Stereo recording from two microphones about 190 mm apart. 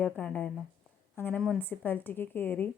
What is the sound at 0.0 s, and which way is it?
Speech, 5° left (ahead or behind).